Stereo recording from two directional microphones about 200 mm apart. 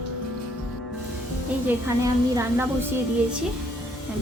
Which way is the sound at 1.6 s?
15° right (ahead or behind).